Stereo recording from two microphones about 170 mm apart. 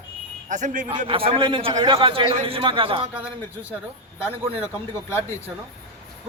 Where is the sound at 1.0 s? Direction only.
35° right (ahead or behind).